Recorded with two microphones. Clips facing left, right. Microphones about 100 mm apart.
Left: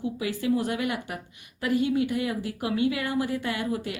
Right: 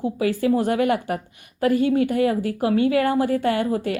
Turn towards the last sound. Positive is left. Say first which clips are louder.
# right 8 dB
turn(degrees=-45)  # may be behind; listen again after turning